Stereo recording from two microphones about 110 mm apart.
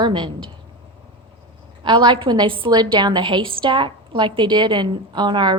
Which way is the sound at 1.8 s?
45° right (ahead or behind).